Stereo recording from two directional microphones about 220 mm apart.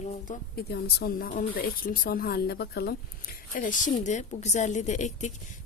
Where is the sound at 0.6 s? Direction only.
45° left (ahead or behind).